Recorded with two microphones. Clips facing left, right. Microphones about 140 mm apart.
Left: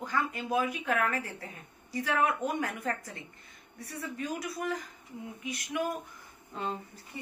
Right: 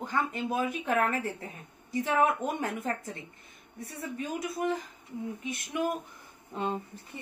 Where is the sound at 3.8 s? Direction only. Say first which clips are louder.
Right 1 dB; 25° right (ahead or behind).